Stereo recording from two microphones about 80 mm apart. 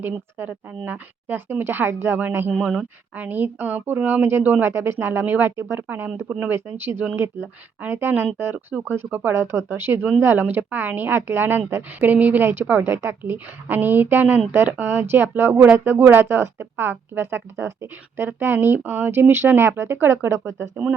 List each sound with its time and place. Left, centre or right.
0.0 s a woman's voice: right
2.5 s speech: centre
3.2 s a woman's voice: right